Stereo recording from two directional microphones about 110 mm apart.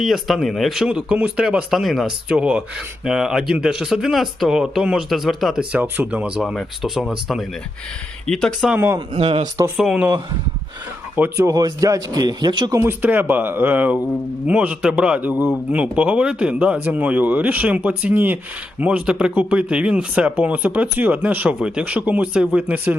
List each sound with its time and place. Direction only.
0.0 s speech: centre (ahead or behind)
2.3 s speech: 10° right (ahead or behind)
8.3 s speech: 5° left (ahead or behind)
9.1 s speech: 65° right (ahead or behind)
9.7 s speech: 5° right (ahead or behind)
11.3 s speech: 30° right (ahead or behind)
12.7 s speech: 20° right (ahead or behind)